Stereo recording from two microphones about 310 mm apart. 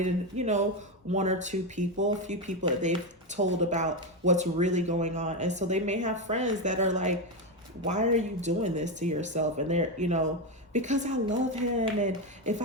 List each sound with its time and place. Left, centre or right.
0.0 s speech: right